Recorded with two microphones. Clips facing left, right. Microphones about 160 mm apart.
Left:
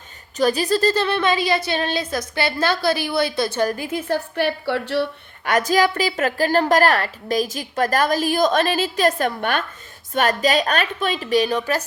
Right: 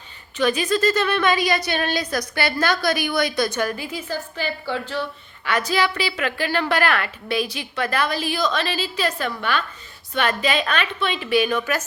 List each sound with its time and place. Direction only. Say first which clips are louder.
0.3 s a woman's voice: left 2 dB; 35° left (ahead or behind)
3.8 s a woman's voice: left 5 dB; 50° left (ahead or behind); by 5.0 s 70° left (ahead or behind)
5.5 s a woman's voice: left 4 dB; 45° left (ahead or behind)